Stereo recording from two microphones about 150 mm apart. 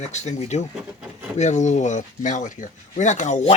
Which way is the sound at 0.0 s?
50° left (ahead or behind).